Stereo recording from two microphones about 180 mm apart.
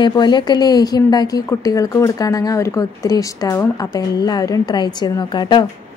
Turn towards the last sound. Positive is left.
turn(degrees=25)  # may be behind; listen again after turning